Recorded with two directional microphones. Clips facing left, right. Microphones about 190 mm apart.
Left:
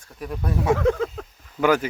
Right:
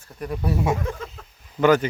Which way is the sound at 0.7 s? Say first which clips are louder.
Left 9 dB; 90° left.